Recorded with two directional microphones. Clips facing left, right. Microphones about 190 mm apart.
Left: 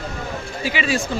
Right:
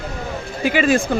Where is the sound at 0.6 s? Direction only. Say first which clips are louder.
Right 7 dB; 50° right (ahead or behind).